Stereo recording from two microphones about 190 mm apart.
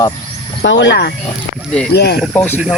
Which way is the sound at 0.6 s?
70° left (ahead or behind).